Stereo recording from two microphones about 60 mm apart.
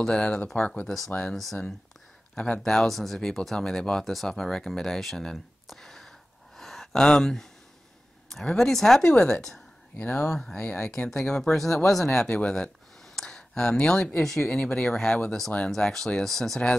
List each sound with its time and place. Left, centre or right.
0.0 s speech: centre
2.3 s speech: centre
9.9 s speech: left
10.2 s speech: centre
14.2 s speech: centre